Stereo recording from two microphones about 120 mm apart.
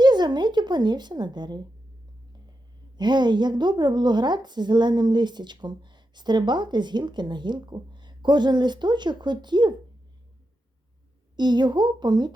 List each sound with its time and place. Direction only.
0.0 s a woman's voice: 35° right (ahead or behind)
2.9 s a woman's voice: 40° right (ahead or behind)
11.3 s a woman's voice: 40° right (ahead or behind)